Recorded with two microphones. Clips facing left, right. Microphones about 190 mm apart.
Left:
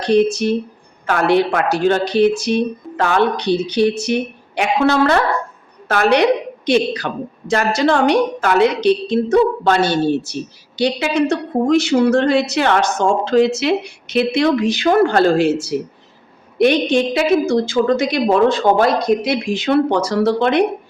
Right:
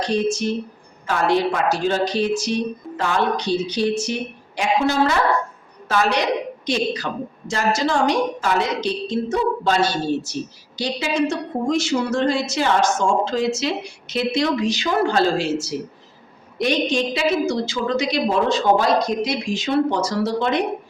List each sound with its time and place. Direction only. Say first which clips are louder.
0.0 s a woman's voice: left 6 dB; 65° left (ahead or behind)